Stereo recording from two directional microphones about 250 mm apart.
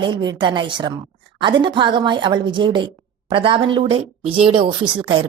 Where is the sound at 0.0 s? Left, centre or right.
Centre.